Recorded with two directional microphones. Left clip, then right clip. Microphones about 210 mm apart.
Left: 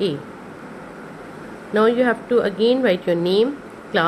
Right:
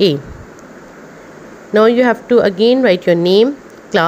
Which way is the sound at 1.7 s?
35° right (ahead or behind).